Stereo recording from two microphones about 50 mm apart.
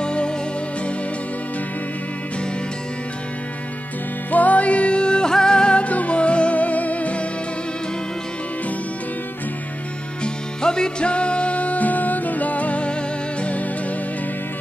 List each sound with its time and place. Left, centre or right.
0.0 s music: left
4.3 s music: left
10.2 s music: centre